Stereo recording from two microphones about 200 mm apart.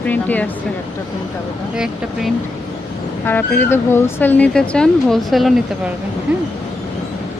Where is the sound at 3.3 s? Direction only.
10° left (ahead or behind).